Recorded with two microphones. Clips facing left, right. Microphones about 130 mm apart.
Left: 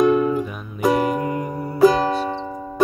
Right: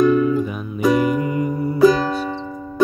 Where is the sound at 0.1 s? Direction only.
55° left (ahead or behind).